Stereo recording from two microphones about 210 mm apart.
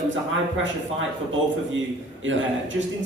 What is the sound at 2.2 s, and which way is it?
Speech, 65° right (ahead or behind).